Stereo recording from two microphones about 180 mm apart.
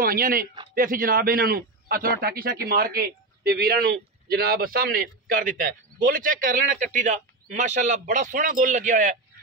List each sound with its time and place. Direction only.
0.0 s a man's voice: 55° right (ahead or behind)